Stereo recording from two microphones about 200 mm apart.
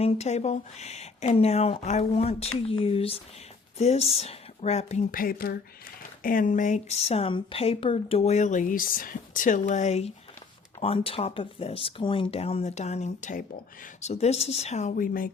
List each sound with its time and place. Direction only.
0.0 s speech: 30° left (ahead or behind)